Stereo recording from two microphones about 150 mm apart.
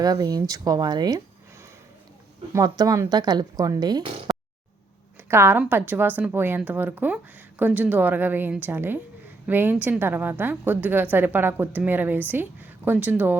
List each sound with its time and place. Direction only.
0.0 s speech: 25° right (ahead or behind)
2.5 s speech: 25° right (ahead or behind)
5.3 s a woman's voice: 15° right (ahead or behind)